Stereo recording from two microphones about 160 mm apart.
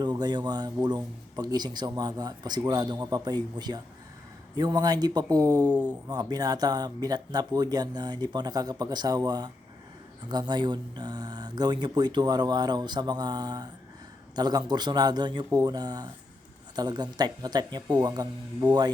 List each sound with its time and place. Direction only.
0.0 s speech: 25° right (ahead or behind)